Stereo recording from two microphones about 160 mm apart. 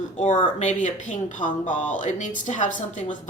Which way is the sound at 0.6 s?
50° left (ahead or behind).